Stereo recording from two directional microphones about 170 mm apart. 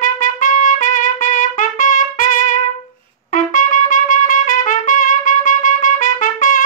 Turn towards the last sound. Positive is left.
turn(degrees=50)  # may be behind; listen again after turning